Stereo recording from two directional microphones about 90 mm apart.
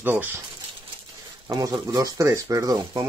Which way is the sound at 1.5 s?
45° right (ahead or behind).